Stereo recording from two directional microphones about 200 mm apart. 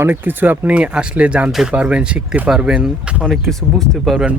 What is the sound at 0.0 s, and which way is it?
Speech, 10° right (ahead or behind).